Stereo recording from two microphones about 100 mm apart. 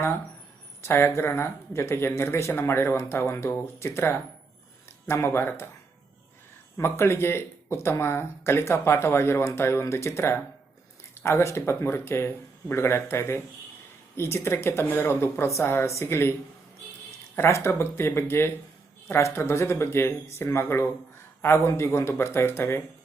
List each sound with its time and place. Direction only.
0.8 s speech: 25° left (ahead or behind)
6.7 s speech: 25° left (ahead or behind)
17.3 s speech: 25° left (ahead or behind)